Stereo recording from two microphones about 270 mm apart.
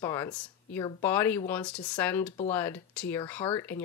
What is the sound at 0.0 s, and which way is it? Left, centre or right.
Speech, centre.